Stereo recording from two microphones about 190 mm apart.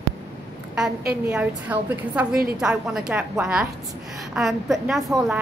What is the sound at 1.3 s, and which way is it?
A woman's voice, 10° right (ahead or behind).